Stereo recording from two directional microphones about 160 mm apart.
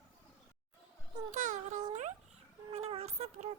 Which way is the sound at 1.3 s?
50° right (ahead or behind).